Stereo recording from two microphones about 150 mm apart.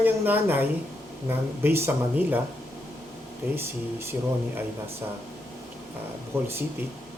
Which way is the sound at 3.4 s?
15° right (ahead or behind).